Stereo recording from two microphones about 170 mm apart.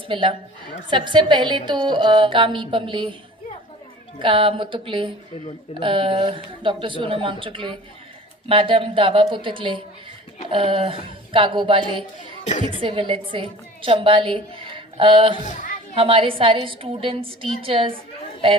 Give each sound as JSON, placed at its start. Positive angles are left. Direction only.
{"t": 0.1, "sound": "a woman's voice", "side_deg": -30}
{"t": 4.2, "sound": "a woman's voice", "side_deg": -30}
{"t": 12.5, "sound": "speech", "side_deg": 45}
{"t": 12.8, "sound": "a woman's voice", "side_deg": -30}
{"t": 15.4, "sound": "a sound", "side_deg": 45}
{"t": 16.0, "sound": "a woman's voice", "side_deg": -30}